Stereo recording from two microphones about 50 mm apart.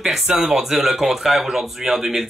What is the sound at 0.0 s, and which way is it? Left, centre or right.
Speech, centre.